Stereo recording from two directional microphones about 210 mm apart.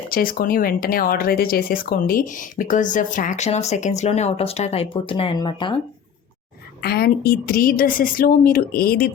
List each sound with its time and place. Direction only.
0.1 s speech: 45° left (ahead or behind); by 5.7 s 20° left (ahead or behind)
6.8 s a woman's voice: 50° left (ahead or behind)